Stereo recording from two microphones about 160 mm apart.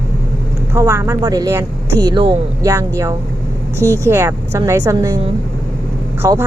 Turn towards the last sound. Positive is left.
turn(degrees=-20)  # may be behind; listen again after turning